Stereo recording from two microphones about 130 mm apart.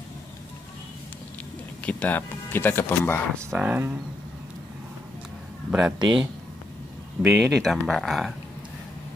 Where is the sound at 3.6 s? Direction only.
10° right (ahead or behind).